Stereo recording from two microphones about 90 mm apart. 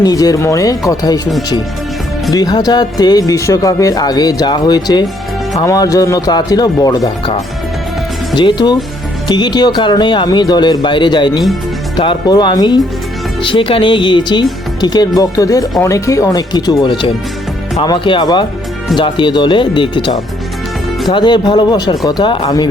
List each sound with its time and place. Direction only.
0.0 s speech: 45° left (ahead or behind)
8.4 s speech: 55° left (ahead or behind)
12.3 s speech: 50° left (ahead or behind)
13.4 s speech: 70° left (ahead or behind); by 16.4 s 35° left (ahead or behind)
16.5 s speech: 50° left (ahead or behind); by 20.1 s 65° left (ahead or behind)
21.1 s speech: 55° left (ahead or behind)
22.4 s speech: 45° left (ahead or behind)